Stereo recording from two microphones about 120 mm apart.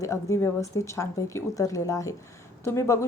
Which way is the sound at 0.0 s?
25° left (ahead or behind).